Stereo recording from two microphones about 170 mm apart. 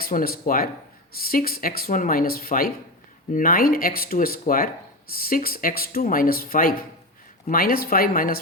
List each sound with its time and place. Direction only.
0.0 s speech: 60° left (ahead or behind)